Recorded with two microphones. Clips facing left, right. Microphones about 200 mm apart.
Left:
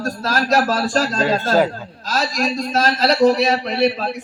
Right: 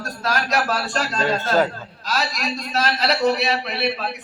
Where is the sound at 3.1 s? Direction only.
35° left (ahead or behind).